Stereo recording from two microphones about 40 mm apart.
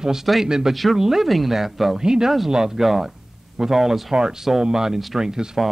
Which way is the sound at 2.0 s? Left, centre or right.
Centre.